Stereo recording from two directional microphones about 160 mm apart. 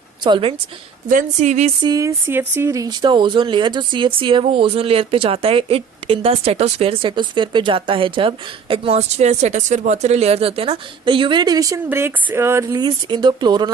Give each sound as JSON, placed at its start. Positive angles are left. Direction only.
{"t": 0.3, "sound": "speech", "side_deg": -30}
{"t": 1.0, "sound": "a woman's voice", "side_deg": -50}
{"t": 1.8, "sound": "speech", "side_deg": -20}